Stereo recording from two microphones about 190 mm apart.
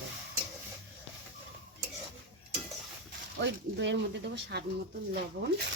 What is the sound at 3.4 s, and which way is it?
Speech, 70° right (ahead or behind).